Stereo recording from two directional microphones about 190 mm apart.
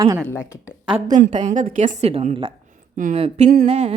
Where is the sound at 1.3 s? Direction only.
40° right (ahead or behind).